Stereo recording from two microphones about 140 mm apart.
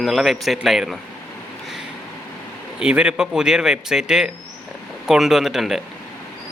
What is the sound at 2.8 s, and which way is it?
Speech, 10° right (ahead or behind).